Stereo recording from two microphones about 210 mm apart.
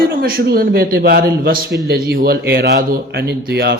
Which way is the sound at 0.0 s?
45° right (ahead or behind).